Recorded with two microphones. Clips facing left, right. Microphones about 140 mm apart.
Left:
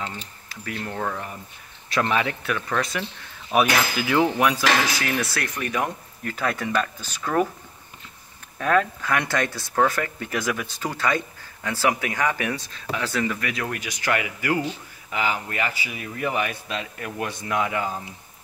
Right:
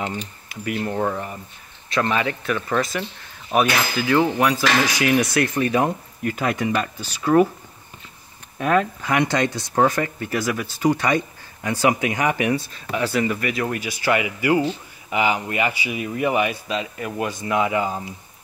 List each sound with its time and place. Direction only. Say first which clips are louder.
0.5 s speech: right 6 dB; 10° right (ahead or behind)
1.9 s speech: right 1 dB; centre (ahead or behind)
4.9 s speech: right 8 dB; 15° right (ahead or behind); by 5.9 s 30° right (ahead or behind)
6.2 s speech: right 4 dB; 15° right (ahead or behind)
8.5 s speech: right 2 dB; 15° right (ahead or behind)
10.1 s speech: right 3 dB; 5° right (ahead or behind)
10.8 s speech: right 9 dB; 15° right (ahead or behind)
12.5 s speech: right 5 dB; 5° right (ahead or behind)